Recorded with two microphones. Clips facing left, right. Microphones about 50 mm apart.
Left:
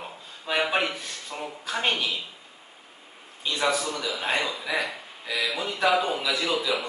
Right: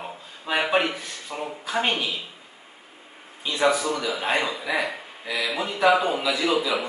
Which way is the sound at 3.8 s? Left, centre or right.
Right.